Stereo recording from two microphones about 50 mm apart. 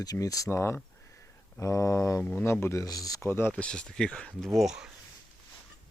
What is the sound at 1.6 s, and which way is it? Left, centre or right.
Mantra, left.